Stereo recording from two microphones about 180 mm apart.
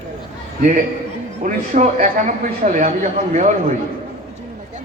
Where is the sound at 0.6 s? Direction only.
50° right (ahead or behind).